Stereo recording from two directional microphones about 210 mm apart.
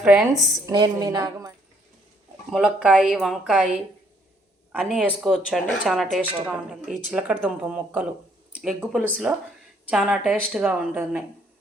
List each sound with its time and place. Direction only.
0.0 s speech: centre (ahead or behind)
0.6 s a woman's voice: 20° right (ahead or behind)
2.5 s speech: 5° right (ahead or behind)